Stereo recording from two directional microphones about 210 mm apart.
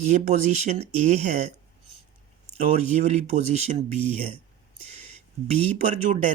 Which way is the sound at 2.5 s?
30° right (ahead or behind).